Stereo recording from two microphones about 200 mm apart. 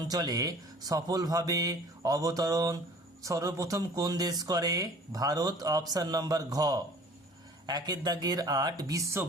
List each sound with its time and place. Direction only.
0.1 s speech: 20° right (ahead or behind)